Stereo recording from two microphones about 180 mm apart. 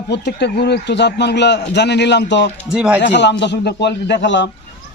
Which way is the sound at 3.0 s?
75° left (ahead or behind).